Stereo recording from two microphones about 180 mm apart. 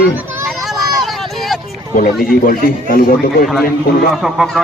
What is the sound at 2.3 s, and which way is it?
Speech, 55° left (ahead or behind).